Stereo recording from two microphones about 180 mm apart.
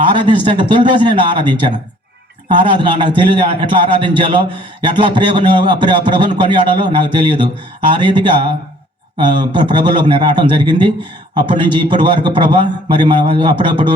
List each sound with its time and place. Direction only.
0.0 s a man's voice: 25° right (ahead or behind)